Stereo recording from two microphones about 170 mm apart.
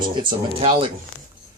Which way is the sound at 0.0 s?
30° right (ahead or behind).